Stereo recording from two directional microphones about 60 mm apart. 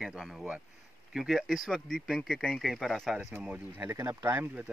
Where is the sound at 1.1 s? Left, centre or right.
Centre.